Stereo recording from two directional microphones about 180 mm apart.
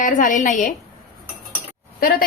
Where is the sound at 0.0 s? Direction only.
45° left (ahead or behind).